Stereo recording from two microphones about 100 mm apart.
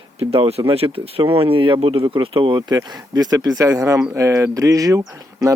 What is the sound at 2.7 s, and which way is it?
Speech, 40° right (ahead or behind).